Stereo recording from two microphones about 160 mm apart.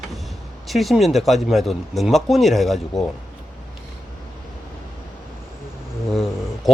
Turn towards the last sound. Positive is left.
turn(degrees=0)  # may be behind; listen again after turning